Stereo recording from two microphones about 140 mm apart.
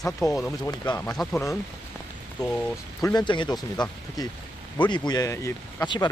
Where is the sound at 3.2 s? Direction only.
30° left (ahead or behind).